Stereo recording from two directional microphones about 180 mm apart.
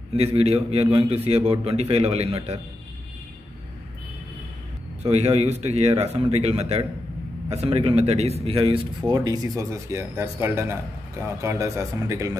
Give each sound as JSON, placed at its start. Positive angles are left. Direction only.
{"t": 0.1, "sound": "a man's voice", "side_deg": -35}
{"t": 5.0, "sound": "a man's voice", "side_deg": -35}